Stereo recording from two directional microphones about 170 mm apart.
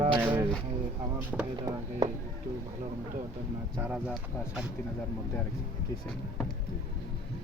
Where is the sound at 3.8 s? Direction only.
5° right (ahead or behind).